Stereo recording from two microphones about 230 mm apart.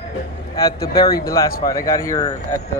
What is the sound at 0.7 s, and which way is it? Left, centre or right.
Speech, left.